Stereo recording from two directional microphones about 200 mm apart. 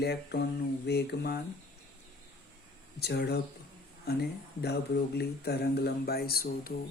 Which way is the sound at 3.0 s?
55° left (ahead or behind).